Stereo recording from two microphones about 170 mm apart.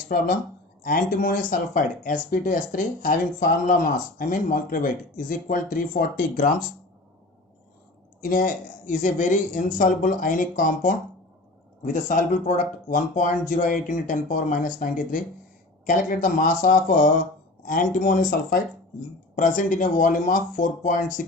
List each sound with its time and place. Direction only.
0.1 s speech: 60° left (ahead or behind)
8.2 s speech: 50° left (ahead or behind)